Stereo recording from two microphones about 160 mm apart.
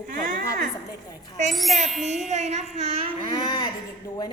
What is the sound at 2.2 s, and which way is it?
Speech, 45° right (ahead or behind).